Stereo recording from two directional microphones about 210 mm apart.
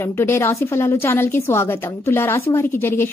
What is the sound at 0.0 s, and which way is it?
A woman's voice, 10° left (ahead or behind).